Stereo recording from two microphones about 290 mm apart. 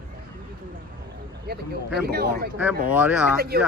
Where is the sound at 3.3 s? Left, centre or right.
Right.